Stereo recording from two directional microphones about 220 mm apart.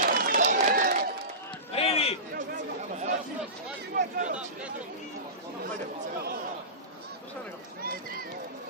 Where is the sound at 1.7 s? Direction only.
25° left (ahead or behind).